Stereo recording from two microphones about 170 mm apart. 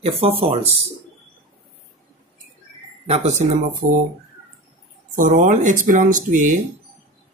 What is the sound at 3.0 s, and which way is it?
Speech, 40° right (ahead or behind).